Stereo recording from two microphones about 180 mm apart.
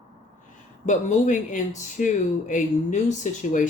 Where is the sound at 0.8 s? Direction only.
45° left (ahead or behind).